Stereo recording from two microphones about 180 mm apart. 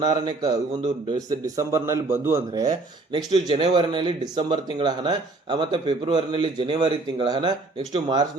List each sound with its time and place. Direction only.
0.0 s a man's voice: 25° right (ahead or behind)
3.3 s a man's voice: 30° right (ahead or behind)